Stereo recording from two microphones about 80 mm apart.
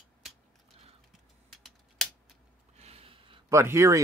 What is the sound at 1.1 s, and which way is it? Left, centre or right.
Typing, centre.